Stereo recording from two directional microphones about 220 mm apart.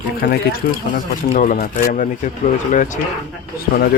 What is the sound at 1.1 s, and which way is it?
A man's voice, 35° left (ahead or behind).